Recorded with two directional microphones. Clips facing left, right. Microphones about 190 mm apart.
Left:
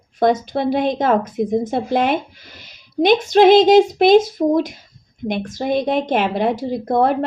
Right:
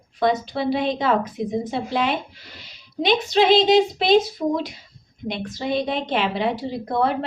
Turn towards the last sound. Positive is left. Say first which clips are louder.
# left 5 dB
turn(degrees=45)  # may be behind; listen again after turning